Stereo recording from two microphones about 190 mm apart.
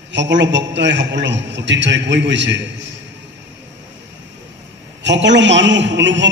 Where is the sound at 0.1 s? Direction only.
70° right (ahead or behind).